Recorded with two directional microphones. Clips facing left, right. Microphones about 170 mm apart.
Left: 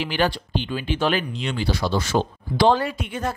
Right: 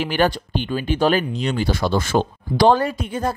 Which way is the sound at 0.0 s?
50° right (ahead or behind).